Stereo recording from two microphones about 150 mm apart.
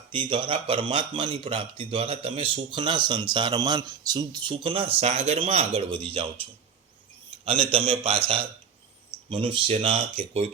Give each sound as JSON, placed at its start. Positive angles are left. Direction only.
{"t": 0.1, "sound": "speech", "side_deg": -35}
{"t": 7.7, "sound": "speech", "side_deg": -40}
{"t": 9.3, "sound": "speech", "side_deg": -35}